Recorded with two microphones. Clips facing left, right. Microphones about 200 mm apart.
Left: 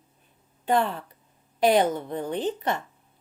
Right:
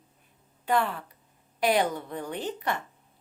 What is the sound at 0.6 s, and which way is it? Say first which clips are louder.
A woman's voice: left 3 dB; 25° left (ahead or behind).